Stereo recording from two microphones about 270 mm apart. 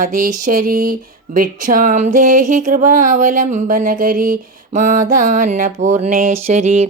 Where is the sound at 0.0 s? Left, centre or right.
Right.